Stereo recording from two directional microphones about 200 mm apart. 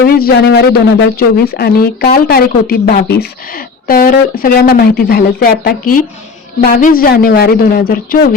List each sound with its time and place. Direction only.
0.0 s speech: 55° left (ahead or behind)